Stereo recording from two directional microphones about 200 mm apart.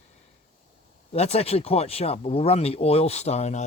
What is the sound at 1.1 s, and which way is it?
Speech, 30° left (ahead or behind).